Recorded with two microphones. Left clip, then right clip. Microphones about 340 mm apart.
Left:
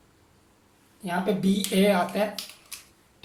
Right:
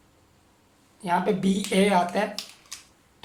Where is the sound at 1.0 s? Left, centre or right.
Right.